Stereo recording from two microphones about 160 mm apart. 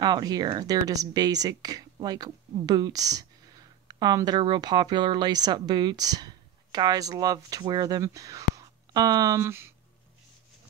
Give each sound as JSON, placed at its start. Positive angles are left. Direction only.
{"t": 0.0, "sound": "speech", "side_deg": -25}